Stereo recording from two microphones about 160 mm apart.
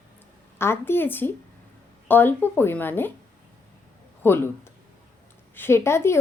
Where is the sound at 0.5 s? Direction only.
15° left (ahead or behind).